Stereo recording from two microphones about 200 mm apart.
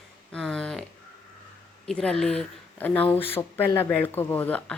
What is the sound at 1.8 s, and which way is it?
Speech, 5° left (ahead or behind).